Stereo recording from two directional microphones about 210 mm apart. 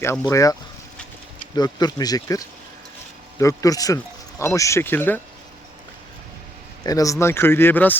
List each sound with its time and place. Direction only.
0.0 s speech: 15° left (ahead or behind)
1.5 s speech: 20° left (ahead or behind)
6.8 s speech: 15° left (ahead or behind)